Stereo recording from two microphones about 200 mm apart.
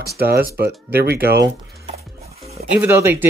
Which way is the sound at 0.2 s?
50° right (ahead or behind).